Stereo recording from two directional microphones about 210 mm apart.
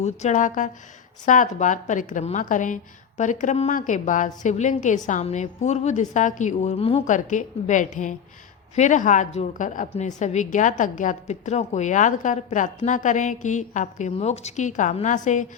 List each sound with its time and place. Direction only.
0.0 s a woman's voice: 35° left (ahead or behind)